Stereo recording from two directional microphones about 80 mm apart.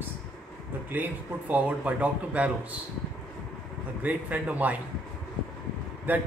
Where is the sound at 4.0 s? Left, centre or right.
Centre.